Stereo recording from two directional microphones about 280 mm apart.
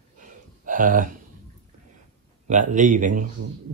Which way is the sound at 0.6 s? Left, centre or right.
Right.